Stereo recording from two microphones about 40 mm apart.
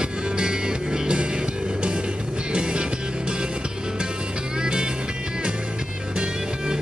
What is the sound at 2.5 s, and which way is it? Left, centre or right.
Music, right.